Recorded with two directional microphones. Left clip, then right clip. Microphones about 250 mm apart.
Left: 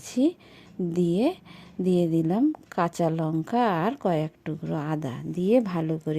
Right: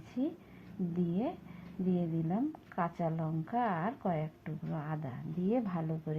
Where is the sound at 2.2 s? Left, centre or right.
Left.